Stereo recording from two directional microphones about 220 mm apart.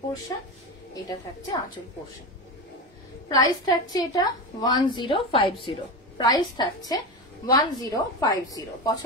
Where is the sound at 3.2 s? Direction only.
15° left (ahead or behind).